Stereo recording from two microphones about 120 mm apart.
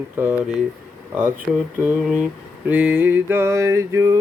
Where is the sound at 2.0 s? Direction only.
10° right (ahead or behind).